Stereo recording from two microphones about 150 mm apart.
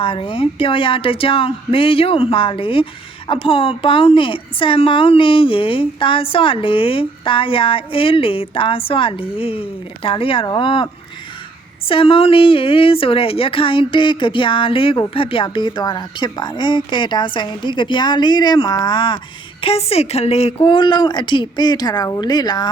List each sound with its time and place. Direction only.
0.0 s a woman's voice: 35° left (ahead or behind)
11.9 s a woman's voice: 35° left (ahead or behind)
19.6 s a woman's voice: 40° left (ahead or behind)